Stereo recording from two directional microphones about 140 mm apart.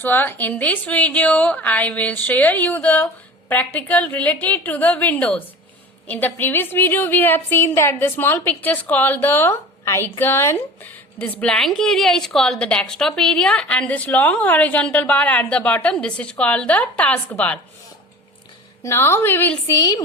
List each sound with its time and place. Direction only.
0.0 s a woman's voice: 15° left (ahead or behind)
18.8 s a woman's voice: 20° left (ahead or behind)